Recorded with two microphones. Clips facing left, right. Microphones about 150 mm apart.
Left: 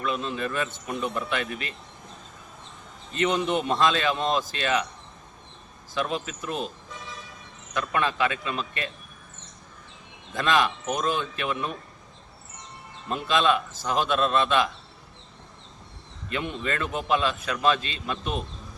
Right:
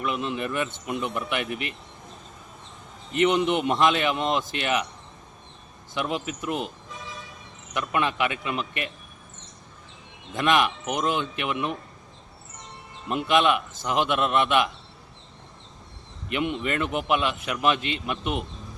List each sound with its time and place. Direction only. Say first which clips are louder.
0.0 s a man's voice: right 1 dB; 20° right (ahead or behind)
3.1 s a man's voice: right 3 dB; 20° right (ahead or behind)
5.9 s a man's voice: even; 20° right (ahead or behind)
7.7 s a man's voice: right 1 dB; 20° right (ahead or behind)
10.3 s a man's voice: right 1 dB; 20° right (ahead or behind)
13.1 s a man's voice: right 2 dB; 20° right (ahead or behind)
16.3 s a man's voice: right 3 dB; 20° right (ahead or behind)